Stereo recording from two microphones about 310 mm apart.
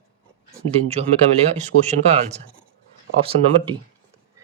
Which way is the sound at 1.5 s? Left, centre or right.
Right.